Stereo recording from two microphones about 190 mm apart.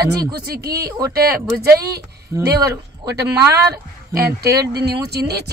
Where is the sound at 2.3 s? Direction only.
15° right (ahead or behind).